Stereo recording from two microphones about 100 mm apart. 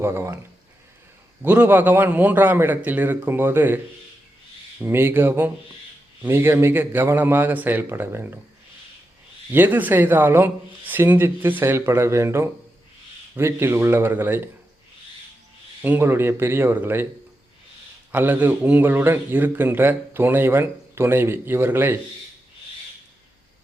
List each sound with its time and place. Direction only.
0.0 s a man's voice: 25° right (ahead or behind)
1.4 s a man's voice: 20° right (ahead or behind)
4.8 s a man's voice: 20° right (ahead or behind)
9.5 s a man's voice: 20° right (ahead or behind)
15.8 s a man's voice: 20° right (ahead or behind)
18.1 s a man's voice: 20° right (ahead or behind)